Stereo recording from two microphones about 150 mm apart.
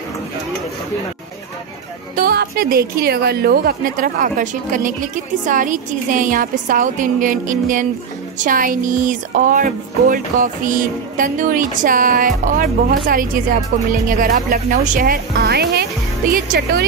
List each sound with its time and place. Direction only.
2.1 s a woman's voice: 85° right